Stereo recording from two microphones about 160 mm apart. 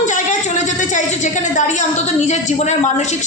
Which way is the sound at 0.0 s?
50° left (ahead or behind).